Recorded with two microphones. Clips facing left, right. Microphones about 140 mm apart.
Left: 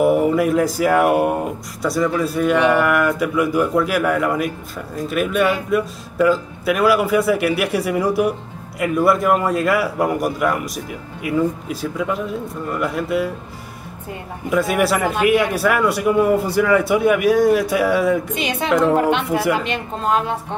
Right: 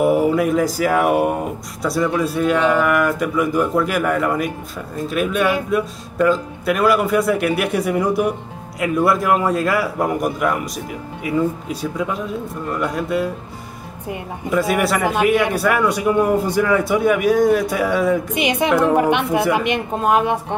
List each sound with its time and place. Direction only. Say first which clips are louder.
0.0 s a man's voice: even; centre (ahead or behind)
14.5 s a man's voice: even; centre (ahead or behind)
18.3 s speech: right 2 dB; 15° right (ahead or behind)